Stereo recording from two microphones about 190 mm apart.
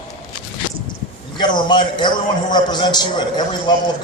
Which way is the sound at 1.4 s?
25° left (ahead or behind).